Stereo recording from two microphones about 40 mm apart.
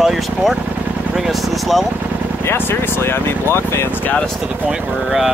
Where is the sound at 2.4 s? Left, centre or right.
Left.